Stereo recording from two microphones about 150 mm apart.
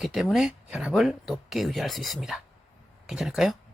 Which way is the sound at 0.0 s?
Centre (ahead or behind).